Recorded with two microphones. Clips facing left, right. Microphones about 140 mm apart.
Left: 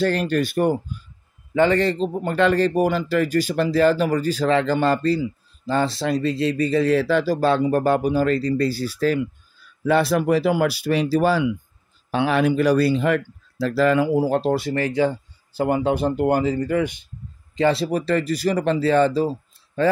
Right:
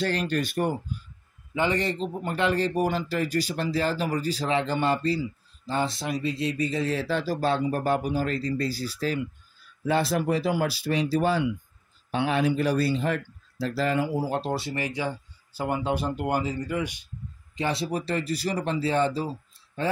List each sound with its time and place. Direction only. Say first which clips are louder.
0.0 s speech: left 6 dB; 50° left (ahead or behind)
1.5 s a man's voice: left 8 dB; 55° left (ahead or behind)
2.2 s speech: left 7 dB; 85° left
3.3 s speech: left 8 dB; 50° left (ahead or behind); by 4.2 s 70° left (ahead or behind)
4.4 s speech: left 7 dB; 85° left
15.5 s speech: left 7 dB; 55° left (ahead or behind)
16.4 s speech: left 8 dB; 55° left (ahead or behind)
17.6 s speech: left 8 dB; 90° left